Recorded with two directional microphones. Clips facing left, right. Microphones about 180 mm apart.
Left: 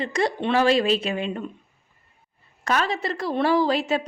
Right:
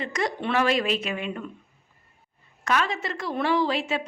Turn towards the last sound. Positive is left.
turn(degrees=40)  # may be behind; listen again after turning